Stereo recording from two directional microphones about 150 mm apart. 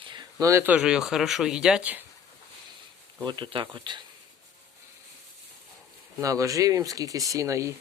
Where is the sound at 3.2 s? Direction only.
30° right (ahead or behind).